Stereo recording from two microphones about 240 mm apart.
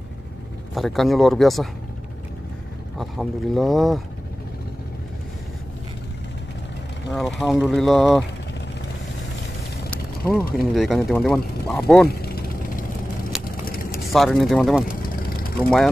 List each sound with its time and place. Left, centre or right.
0.7 s speech: centre
3.0 s speech: centre
7.1 s speech: centre
9.8 s mechanisms: centre
10.7 s speech: centre
12.1 s vehicle: left
13.3 s vehicle: centre
13.9 s speech: centre
15.0 s vehicle: left